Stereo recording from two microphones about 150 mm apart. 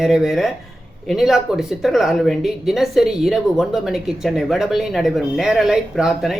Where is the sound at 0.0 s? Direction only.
5° right (ahead or behind).